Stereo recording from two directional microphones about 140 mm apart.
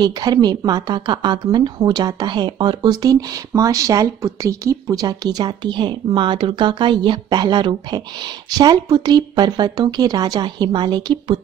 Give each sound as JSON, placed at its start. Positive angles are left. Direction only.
{"t": 0.0, "sound": "speech", "side_deg": -30}